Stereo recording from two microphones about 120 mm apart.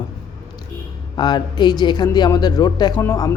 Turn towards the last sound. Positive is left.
turn(degrees=30)  # may be behind; listen again after turning